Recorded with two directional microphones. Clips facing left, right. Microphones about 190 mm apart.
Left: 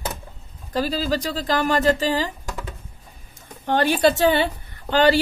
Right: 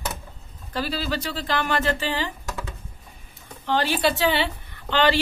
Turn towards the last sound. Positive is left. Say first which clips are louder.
# left 4 dB
turn(degrees=40)  # may be behind; listen again after turning